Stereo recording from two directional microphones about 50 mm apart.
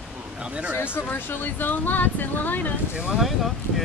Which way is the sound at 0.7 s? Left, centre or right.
Left.